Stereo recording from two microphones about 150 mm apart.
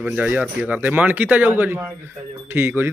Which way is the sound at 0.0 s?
10° right (ahead or behind).